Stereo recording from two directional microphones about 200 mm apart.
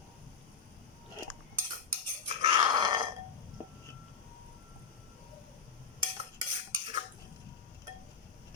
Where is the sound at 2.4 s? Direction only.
20° right (ahead or behind).